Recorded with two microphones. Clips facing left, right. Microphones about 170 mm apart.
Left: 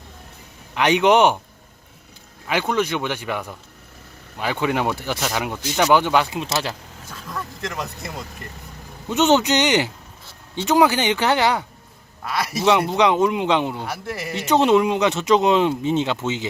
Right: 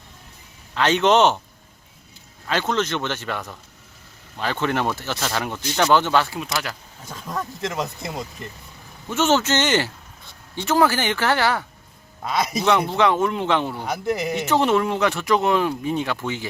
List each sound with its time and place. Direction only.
0.7 s speech: 15° left (ahead or behind)
2.5 s speech: 10° left (ahead or behind); by 6.7 s 25° left (ahead or behind)
7.3 s speech: 20° right (ahead or behind)
9.0 s speech: 20° left (ahead or behind)
12.6 s speech: 15° left (ahead or behind)